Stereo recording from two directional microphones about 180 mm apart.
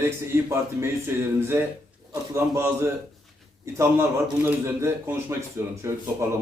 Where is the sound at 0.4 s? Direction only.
15° right (ahead or behind).